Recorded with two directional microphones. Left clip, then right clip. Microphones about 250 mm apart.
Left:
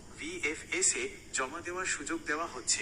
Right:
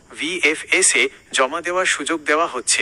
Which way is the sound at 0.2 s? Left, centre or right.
Right.